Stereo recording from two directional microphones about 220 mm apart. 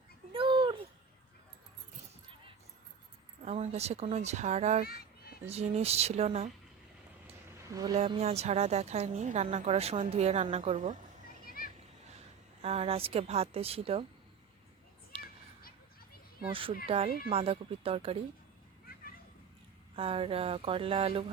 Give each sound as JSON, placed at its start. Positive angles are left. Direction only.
{"t": 0.3, "sound": "a sound", "side_deg": -20}
{"t": 3.4, "sound": "a woman's voice", "side_deg": -30}
{"t": 7.7, "sound": "speech", "side_deg": -15}
{"t": 7.9, "sound": "a woman's voice", "side_deg": -30}
{"t": 11.6, "sound": "a sound", "side_deg": 40}
{"t": 12.6, "sound": "a woman's voice", "side_deg": -30}
{"t": 16.5, "sound": "a woman's voice", "side_deg": -25}
{"t": 20.0, "sound": "a woman's voice", "side_deg": -25}